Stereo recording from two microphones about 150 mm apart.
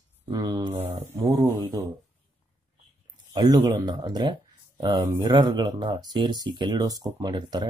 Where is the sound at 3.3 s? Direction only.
25° right (ahead or behind).